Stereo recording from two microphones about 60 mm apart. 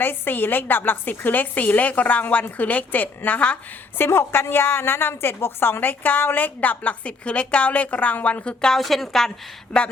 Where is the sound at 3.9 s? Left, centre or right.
Left; by 8.7 s centre.